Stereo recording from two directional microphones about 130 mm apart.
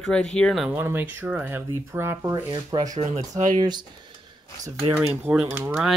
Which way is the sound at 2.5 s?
35° right (ahead or behind).